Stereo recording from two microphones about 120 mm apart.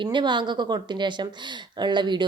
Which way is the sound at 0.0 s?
40° right (ahead or behind).